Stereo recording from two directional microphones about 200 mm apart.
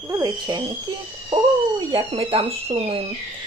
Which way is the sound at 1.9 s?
25° right (ahead or behind).